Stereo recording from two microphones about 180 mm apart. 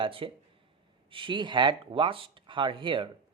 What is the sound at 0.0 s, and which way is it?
Speech, 30° right (ahead or behind).